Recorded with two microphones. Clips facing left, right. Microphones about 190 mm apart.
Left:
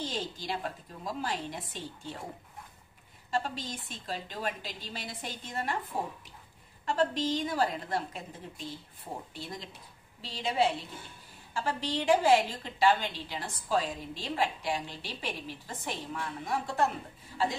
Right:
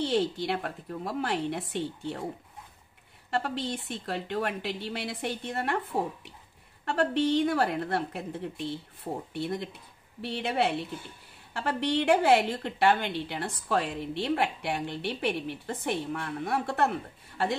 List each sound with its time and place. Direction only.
0.0 s a woman's voice: 65° right (ahead or behind)
3.3 s a woman's voice: 65° right (ahead or behind)
6.9 s a woman's voice: 65° right (ahead or behind)